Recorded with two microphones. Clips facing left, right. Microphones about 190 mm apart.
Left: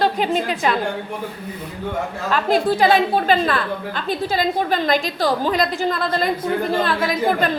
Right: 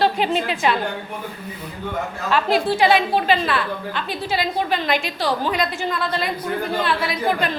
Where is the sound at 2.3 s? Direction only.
45° left (ahead or behind).